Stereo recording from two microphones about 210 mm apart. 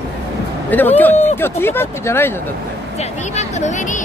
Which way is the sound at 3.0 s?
35° left (ahead or behind).